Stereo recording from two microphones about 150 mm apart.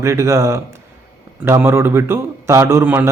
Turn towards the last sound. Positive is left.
turn(degrees=-15)  # may be behind; listen again after turning